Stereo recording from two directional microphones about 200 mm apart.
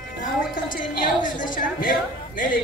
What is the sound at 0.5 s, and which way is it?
A woman's voice, 45° left (ahead or behind).